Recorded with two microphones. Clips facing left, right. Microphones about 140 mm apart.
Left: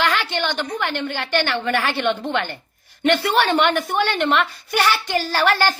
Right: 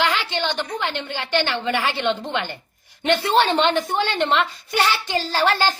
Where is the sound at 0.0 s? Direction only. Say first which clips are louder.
Left 1 dB; 15° right (ahead or behind).